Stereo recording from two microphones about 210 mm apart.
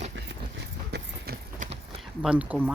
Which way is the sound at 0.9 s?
45° right (ahead or behind).